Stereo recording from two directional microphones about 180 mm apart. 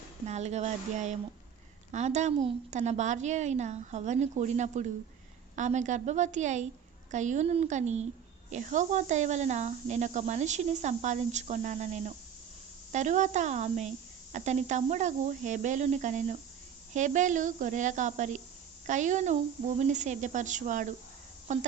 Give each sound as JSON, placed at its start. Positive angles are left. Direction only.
{"t": 0.3, "sound": "speech", "side_deg": -40}